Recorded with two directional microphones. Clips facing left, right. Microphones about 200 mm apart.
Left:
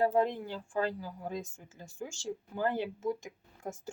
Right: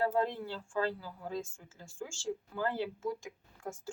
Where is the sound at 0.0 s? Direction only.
15° left (ahead or behind).